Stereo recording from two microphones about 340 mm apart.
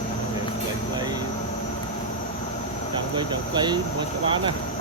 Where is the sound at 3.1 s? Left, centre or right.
Centre.